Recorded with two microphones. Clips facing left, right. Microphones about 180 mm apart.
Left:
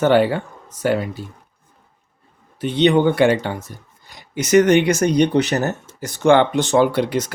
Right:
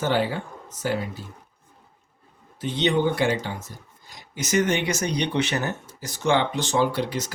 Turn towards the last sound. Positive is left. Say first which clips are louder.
# left 6 dB
turn(degrees=60)  # may be behind; listen again after turning